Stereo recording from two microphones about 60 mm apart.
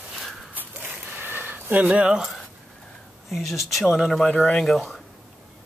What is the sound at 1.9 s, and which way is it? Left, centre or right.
Speech, centre.